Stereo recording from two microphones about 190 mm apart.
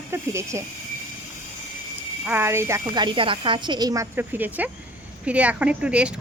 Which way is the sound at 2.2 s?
10° right (ahead or behind).